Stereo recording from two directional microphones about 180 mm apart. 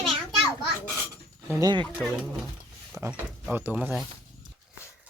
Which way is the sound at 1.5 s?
20° right (ahead or behind).